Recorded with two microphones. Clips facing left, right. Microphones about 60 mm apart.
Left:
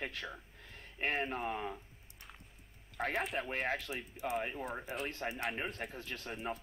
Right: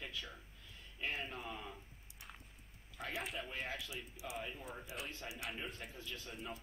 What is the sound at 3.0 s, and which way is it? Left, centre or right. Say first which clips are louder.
Speech: left 8 dB; left.